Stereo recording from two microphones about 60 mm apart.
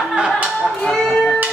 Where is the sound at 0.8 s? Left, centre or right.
Centre.